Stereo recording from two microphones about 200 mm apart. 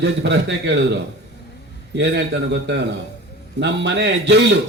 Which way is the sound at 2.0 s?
60° right (ahead or behind).